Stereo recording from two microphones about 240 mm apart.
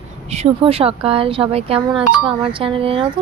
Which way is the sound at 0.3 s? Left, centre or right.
Right.